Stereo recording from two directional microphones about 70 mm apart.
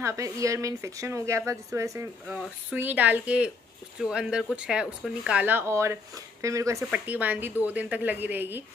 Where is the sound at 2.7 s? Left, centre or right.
Right.